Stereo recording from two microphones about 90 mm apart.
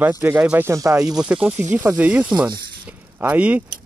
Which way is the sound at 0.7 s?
35° right (ahead or behind).